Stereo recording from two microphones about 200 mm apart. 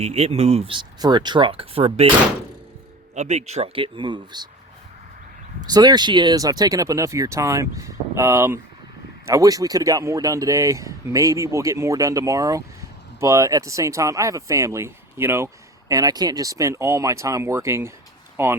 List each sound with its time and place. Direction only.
0.0 s speech: 30° right (ahead or behind)
3.2 s speech: 35° right (ahead or behind)
5.5 s speech: 20° right (ahead or behind)